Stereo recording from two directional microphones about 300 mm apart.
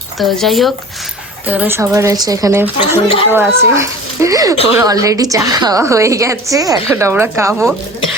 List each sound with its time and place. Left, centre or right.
0.2 s a woman's voice: centre